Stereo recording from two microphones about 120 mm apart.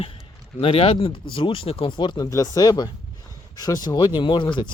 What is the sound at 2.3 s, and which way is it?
Speech, 30° left (ahead or behind).